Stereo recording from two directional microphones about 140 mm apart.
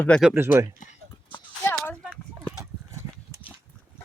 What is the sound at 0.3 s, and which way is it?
Speech, 20° right (ahead or behind).